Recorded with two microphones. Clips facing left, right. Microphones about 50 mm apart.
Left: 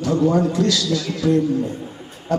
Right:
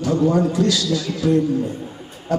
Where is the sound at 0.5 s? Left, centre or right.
Centre.